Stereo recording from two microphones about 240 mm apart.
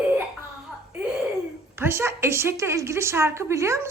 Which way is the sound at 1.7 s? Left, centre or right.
Centre.